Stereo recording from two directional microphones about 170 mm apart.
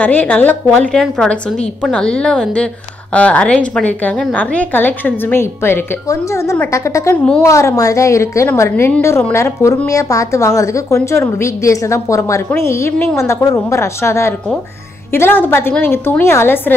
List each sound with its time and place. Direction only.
0.0 s a woman's voice: 10° left (ahead or behind)